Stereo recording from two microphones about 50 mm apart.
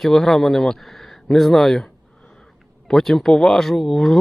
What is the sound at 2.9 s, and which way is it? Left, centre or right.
Speech, centre.